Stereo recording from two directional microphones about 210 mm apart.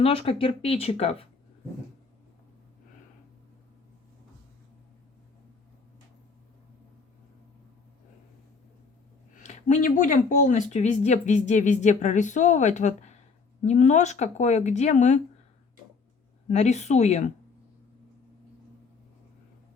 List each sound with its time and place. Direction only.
0.0 s speech: 25° left (ahead or behind)
9.4 s speech: 35° left (ahead or behind)
16.5 s speech: 35° left (ahead or behind)